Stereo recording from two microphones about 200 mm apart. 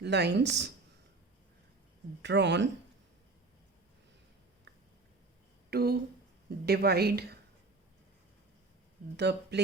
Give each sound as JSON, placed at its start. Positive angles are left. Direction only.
{"t": 0.0, "sound": "speech", "side_deg": -55}
{"t": 2.2, "sound": "speech", "side_deg": -60}
{"t": 5.7, "sound": "a woman's voice", "side_deg": -50}
{"t": 9.1, "sound": "speech", "side_deg": -55}